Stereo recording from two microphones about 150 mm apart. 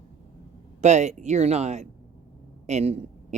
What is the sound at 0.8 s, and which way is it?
Speech, 50° right (ahead or behind).